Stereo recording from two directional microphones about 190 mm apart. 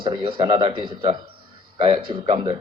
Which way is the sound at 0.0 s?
25° right (ahead or behind).